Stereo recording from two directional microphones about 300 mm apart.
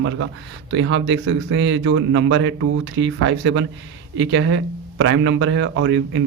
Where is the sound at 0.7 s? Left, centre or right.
Right.